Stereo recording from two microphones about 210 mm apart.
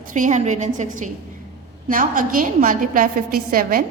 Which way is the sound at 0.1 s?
35° right (ahead or behind).